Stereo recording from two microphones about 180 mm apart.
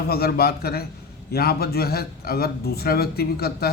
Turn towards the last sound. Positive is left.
turn(degrees=60)  # may be behind; listen again after turning